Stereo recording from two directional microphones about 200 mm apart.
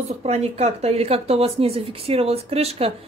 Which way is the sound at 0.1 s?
30° right (ahead or behind).